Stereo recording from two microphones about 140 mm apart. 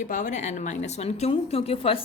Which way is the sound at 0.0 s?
60° left (ahead or behind).